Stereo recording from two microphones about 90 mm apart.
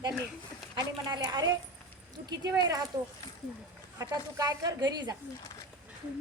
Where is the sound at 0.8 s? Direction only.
45° right (ahead or behind).